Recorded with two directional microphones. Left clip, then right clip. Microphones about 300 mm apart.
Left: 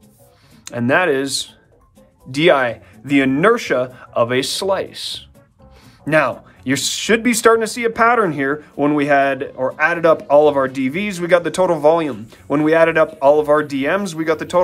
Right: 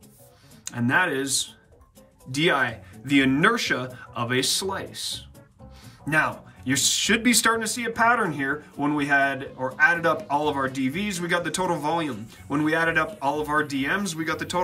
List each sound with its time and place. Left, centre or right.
0.7 s speech: centre
6.6 s speech: centre